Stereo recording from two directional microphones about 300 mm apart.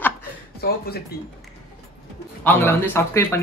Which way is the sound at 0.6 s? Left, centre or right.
Left.